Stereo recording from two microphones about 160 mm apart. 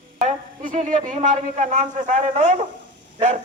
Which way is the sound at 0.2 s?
50° right (ahead or behind).